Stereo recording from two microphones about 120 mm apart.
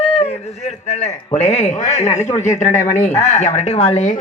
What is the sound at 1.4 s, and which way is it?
A man's voice, 70° left (ahead or behind).